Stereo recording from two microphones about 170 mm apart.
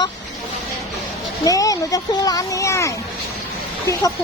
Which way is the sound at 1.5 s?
20° left (ahead or behind).